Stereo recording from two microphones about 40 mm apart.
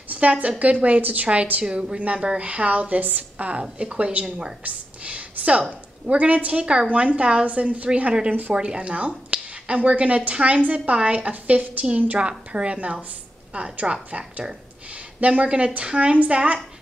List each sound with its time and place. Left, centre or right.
0.1 s a woman's voice: right
4.6 s a sound: right
6.0 s a woman's voice: right
8.3 s speech: right
8.5 s a woman's voice: right
12.2 s a woman's voice: right